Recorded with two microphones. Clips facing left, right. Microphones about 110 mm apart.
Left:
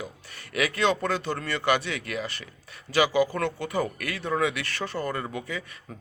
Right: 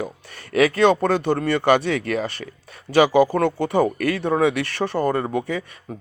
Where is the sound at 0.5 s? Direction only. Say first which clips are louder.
Right 10 dB; 35° right (ahead or behind).